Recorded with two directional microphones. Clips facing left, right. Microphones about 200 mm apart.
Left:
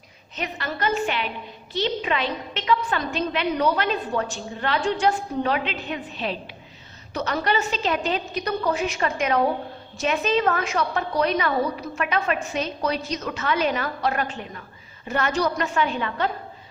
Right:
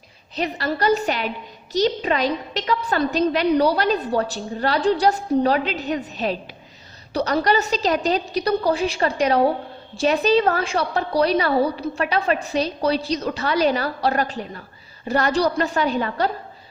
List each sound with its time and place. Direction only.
0.3 s a woman's voice: 35° right (ahead or behind)